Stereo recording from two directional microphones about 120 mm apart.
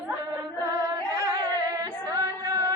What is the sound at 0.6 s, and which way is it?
Music, 30° right (ahead or behind).